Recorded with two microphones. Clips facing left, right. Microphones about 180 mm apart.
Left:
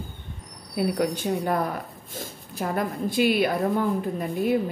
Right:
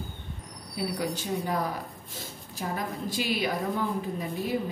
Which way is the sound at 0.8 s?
55° left (ahead or behind).